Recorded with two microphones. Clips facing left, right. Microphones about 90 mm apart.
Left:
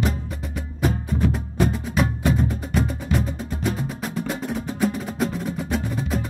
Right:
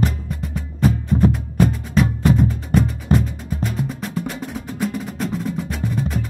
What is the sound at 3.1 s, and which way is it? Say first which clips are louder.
Music: right 6 dB; 40° right (ahead or behind).